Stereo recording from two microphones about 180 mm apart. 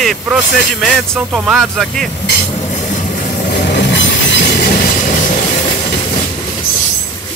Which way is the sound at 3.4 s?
70° left (ahead or behind).